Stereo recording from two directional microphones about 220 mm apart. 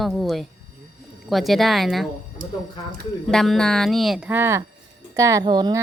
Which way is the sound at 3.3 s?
Centre (ahead or behind).